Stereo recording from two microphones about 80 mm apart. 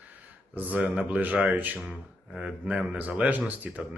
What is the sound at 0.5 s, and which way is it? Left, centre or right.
Speech, centre.